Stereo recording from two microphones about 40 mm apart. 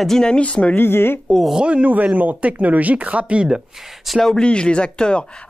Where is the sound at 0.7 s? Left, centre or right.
Left.